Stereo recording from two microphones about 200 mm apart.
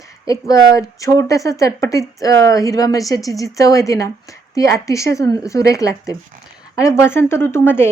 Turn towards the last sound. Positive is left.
turn(degrees=10)  # may be behind; listen again after turning